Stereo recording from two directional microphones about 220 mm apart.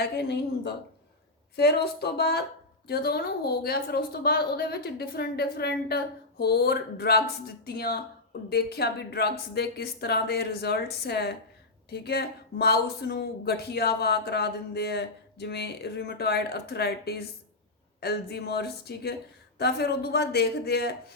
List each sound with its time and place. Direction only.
0.0 s speech: 50° left (ahead or behind)